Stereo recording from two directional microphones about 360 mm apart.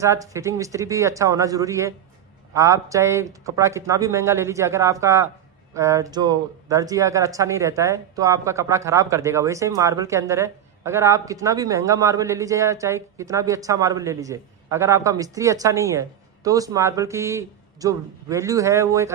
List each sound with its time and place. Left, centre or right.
0.0 s speech: centre